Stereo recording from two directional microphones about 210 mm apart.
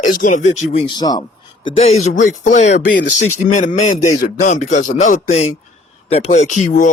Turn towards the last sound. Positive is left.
turn(degrees=35)  # may be behind; listen again after turning